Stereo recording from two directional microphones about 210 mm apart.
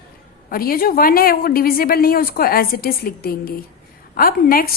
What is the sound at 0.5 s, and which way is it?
A woman's voice, 45° left (ahead or behind).